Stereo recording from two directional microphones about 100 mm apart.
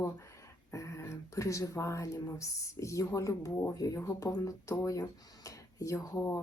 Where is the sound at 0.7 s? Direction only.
30° left (ahead or behind).